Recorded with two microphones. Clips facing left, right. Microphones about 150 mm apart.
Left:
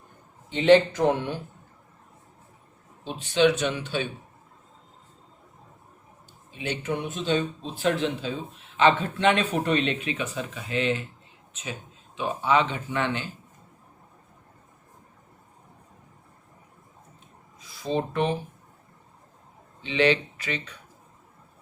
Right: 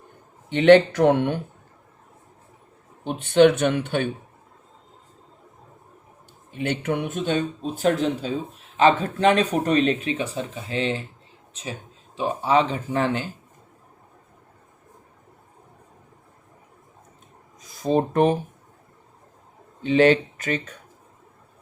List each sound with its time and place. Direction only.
0.5 s speech: 65° right (ahead or behind)
3.0 s speech: 55° right (ahead or behind)
6.5 s speech: 55° right (ahead or behind); by 13.3 s 35° right (ahead or behind)
17.6 s speech: 45° right (ahead or behind)
19.8 s speech: 45° right (ahead or behind)